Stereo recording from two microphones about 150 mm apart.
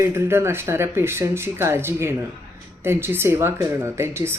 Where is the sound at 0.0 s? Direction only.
15° right (ahead or behind).